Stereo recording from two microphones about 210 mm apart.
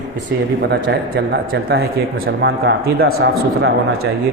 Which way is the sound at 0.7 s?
50° right (ahead or behind).